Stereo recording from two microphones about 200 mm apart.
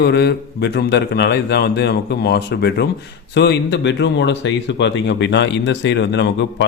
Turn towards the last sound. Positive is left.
turn(degrees=60)  # may be behind; listen again after turning